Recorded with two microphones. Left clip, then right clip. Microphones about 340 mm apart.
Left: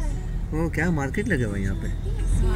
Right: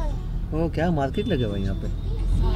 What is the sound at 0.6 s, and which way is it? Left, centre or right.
Speech, right.